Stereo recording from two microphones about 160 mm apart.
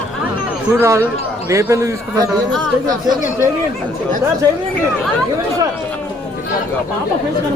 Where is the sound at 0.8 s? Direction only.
15° right (ahead or behind).